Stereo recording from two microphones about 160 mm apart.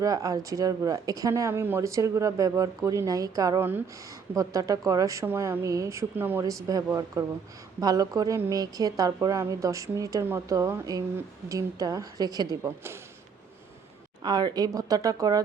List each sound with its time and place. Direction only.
0.0 s speech: 20° right (ahead or behind)
14.3 s speech: 25° right (ahead or behind)